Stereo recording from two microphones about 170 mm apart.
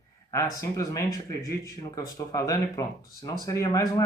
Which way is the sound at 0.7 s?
20° left (ahead or behind).